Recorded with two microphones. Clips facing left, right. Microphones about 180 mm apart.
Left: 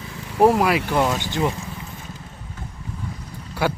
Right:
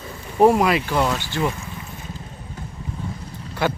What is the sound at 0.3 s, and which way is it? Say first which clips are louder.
Speech: right 1 dB; 5° left (ahead or behind).